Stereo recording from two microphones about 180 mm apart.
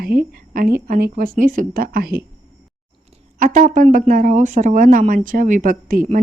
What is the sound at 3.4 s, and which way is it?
Speech, 45° right (ahead or behind).